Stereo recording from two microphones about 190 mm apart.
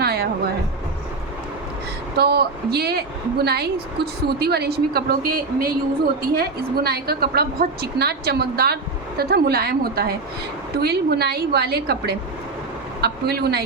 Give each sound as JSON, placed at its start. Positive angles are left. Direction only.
{"t": 0.0, "sound": "music", "side_deg": -55}
{"t": 2.1, "sound": "a woman's voice", "side_deg": -60}